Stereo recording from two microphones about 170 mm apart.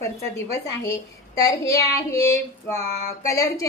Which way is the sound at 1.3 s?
20° left (ahead or behind).